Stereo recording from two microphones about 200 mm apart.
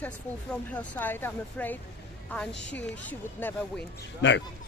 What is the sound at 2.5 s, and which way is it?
Speech, 60° left (ahead or behind).